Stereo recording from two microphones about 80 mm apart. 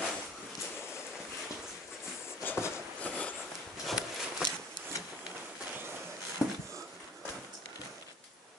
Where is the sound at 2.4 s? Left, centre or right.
Left.